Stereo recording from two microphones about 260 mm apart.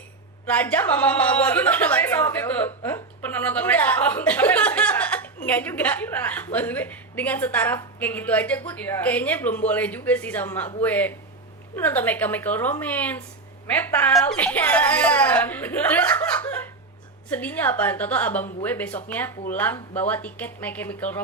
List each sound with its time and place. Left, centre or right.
0.4 s a woman's voice: centre